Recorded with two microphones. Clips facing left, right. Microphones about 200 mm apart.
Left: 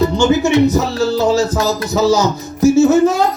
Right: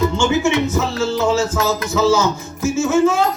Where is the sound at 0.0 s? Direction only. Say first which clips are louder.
Left 4 dB; 35° left (ahead or behind).